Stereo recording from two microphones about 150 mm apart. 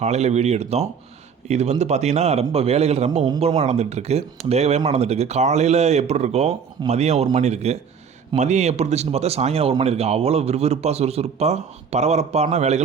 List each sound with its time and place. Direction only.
0.0 s speech: 45° right (ahead or behind)